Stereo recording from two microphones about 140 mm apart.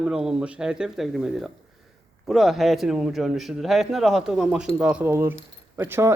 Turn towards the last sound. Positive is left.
turn(degrees=-15)  # may be behind; listen again after turning